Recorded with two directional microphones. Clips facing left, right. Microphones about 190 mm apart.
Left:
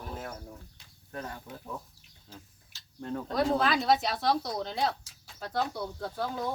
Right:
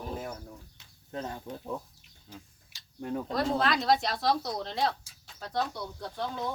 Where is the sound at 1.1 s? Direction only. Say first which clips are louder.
Right 3 dB; 20° right (ahead or behind).